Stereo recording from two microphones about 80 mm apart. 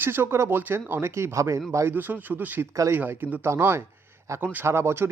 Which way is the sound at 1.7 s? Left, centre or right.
Right.